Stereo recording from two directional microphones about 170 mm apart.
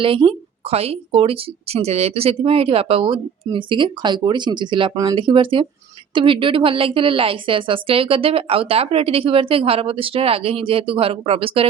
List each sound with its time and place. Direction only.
0.0 s a woman's voice: 30° right (ahead or behind)